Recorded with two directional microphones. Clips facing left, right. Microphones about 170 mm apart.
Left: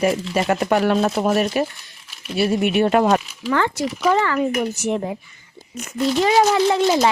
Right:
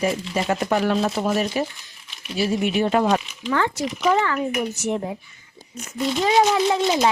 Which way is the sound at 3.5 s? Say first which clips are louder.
Left 2 dB; 80° left.